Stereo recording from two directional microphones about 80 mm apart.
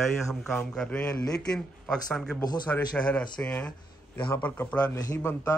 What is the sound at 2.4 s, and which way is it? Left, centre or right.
Speech, left.